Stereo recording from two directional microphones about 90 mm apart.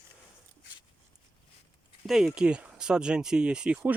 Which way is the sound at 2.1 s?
5° right (ahead or behind).